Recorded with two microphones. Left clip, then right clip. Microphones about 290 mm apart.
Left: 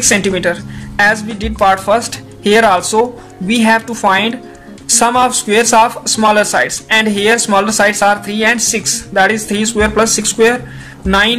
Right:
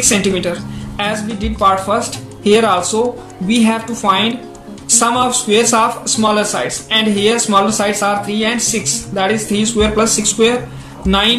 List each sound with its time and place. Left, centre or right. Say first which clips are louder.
0.0 s speech: left 3 dB; left